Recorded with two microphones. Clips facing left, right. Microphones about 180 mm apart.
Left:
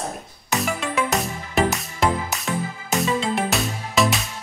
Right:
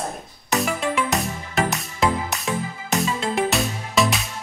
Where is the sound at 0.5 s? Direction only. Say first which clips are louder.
Right 1 dB; centre (ahead or behind).